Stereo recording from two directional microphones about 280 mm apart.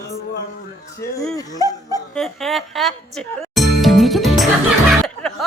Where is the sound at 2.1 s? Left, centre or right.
Centre.